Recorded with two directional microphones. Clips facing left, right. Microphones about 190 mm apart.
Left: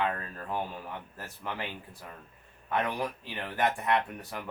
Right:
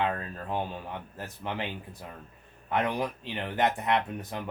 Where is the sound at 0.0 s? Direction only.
20° right (ahead or behind).